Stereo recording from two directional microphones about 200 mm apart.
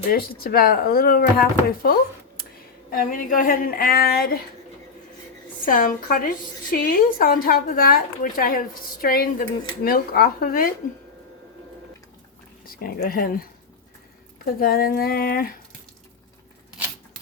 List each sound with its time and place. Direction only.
0.1 s a woman's voice: 50° left (ahead or behind)
5.6 s a woman's voice: 45° left (ahead or behind)
12.6 s a woman's voice: 45° left (ahead or behind)